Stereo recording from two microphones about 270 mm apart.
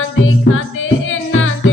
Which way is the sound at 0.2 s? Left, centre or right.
Left.